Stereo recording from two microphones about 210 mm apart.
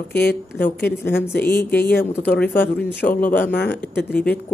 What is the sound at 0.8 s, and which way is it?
A woman's voice, 10° left (ahead or behind).